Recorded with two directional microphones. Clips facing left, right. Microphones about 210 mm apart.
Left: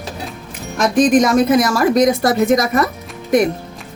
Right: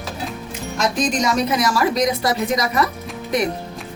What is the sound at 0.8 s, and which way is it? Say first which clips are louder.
A woman's voice: left 8 dB; 55° left (ahead or behind).